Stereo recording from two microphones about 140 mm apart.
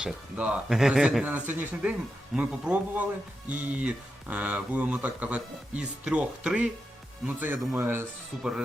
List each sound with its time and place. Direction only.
0.0 s speech: 10° right (ahead or behind)